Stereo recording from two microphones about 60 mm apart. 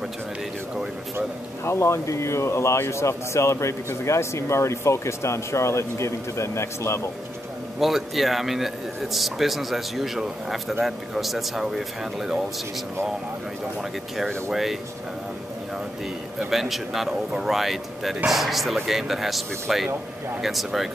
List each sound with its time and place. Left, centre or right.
1.6 s speech: left
7.8 s a man's voice: centre
14.1 s a man's voice: centre
16.3 s a man's voice: centre